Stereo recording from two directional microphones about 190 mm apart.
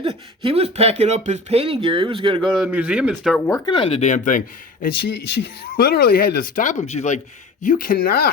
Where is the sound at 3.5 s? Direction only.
25° left (ahead or behind); by 4.4 s 40° left (ahead or behind).